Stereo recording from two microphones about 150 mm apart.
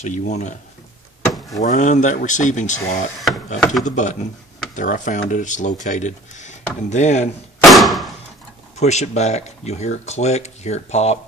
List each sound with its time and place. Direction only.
0.0 s speech: 50° left (ahead or behind)
1.6 s speech: 55° left (ahead or behind)
7.6 s thump: centre (ahead or behind)
8.7 s speech: 50° left (ahead or behind)